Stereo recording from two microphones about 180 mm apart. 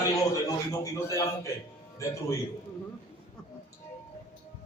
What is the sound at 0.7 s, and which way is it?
Speech, 20° left (ahead or behind).